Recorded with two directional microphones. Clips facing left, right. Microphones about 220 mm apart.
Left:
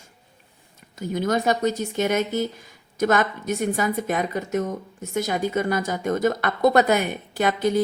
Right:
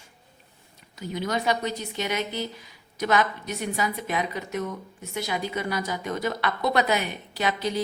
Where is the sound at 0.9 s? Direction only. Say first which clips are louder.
Left 5 dB; 50° left (ahead or behind).